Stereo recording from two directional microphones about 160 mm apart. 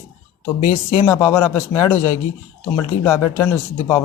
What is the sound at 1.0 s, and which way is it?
Speech, 20° left (ahead or behind).